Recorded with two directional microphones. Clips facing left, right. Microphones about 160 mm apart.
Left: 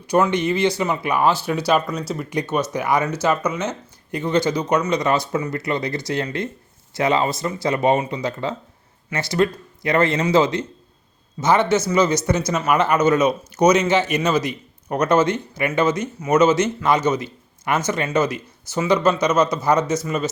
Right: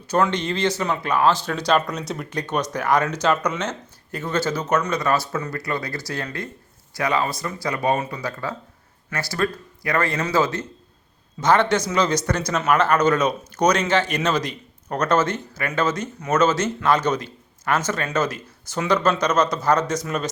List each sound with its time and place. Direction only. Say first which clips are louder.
0.1 s speech: left 3 dB; 10° left (ahead or behind)